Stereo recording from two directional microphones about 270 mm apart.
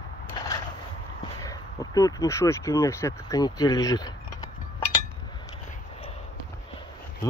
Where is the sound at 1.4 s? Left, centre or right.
Centre.